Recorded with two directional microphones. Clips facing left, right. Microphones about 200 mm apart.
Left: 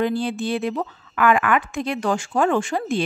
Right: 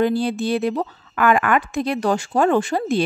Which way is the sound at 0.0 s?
40° right (ahead or behind).